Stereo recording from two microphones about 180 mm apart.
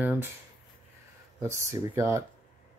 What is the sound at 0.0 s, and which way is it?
Speech, 10° right (ahead or behind).